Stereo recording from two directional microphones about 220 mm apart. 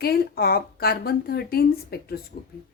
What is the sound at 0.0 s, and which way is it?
A woman's voice, 45° left (ahead or behind).